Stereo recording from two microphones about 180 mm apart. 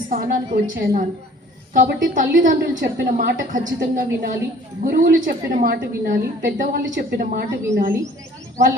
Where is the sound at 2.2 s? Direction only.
50° right (ahead or behind).